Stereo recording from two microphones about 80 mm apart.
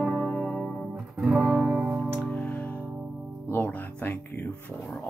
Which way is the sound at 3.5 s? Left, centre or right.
Left.